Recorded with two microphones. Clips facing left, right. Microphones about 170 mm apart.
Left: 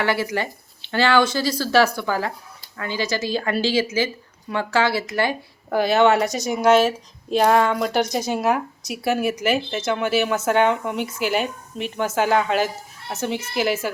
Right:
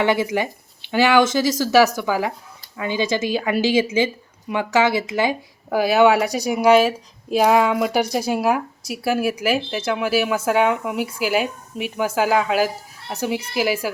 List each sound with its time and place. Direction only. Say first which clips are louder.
0.0 s speech: right 3 dB; 20° right (ahead or behind)